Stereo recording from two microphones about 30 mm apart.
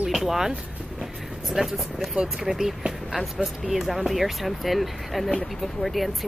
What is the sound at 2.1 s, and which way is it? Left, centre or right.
Speech, right.